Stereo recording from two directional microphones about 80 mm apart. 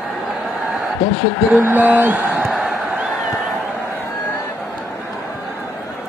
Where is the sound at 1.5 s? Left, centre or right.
Right.